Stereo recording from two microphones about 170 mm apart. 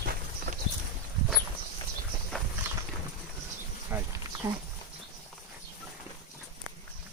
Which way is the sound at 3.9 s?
10° right (ahead or behind).